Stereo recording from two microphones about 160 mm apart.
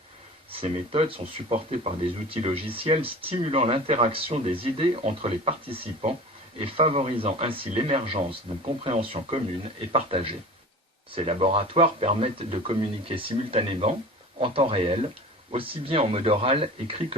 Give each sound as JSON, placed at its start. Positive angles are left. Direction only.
{"t": 0.5, "sound": "speech", "side_deg": -35}